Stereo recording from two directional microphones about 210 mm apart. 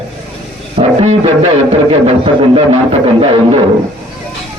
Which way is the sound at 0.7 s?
30° right (ahead or behind).